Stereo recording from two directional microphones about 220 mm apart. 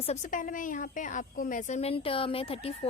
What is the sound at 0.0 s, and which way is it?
A woman's voice, 30° left (ahead or behind).